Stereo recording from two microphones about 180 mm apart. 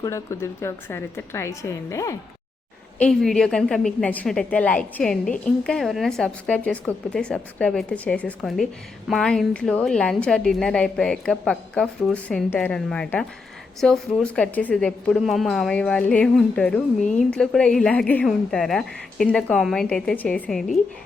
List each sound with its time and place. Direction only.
0.0 s a woman's voice: 15° left (ahead or behind)
3.0 s a woman's voice: centre (ahead or behind)